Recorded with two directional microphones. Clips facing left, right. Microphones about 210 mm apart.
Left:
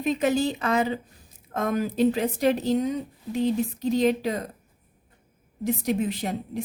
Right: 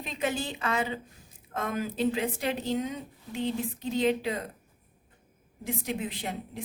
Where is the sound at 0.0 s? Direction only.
45° left (ahead or behind).